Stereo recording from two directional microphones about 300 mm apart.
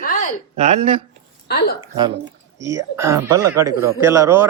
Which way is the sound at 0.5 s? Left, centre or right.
Right.